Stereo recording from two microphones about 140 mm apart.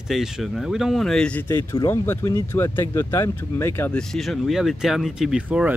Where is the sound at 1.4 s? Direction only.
20° left (ahead or behind).